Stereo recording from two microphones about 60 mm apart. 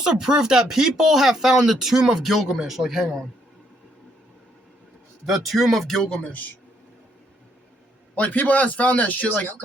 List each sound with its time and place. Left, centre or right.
0.0 s speech: centre
5.2 s speech: centre
8.1 s speech: left